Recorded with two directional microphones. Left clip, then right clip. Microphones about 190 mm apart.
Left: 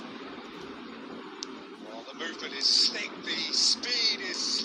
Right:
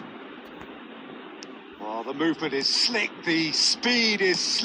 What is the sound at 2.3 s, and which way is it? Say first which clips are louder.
A man's voice: right 1 dB; 5° left (ahead or behind).